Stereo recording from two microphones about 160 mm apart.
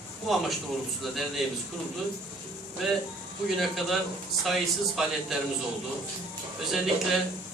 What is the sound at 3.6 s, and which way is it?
A man's voice, centre (ahead or behind).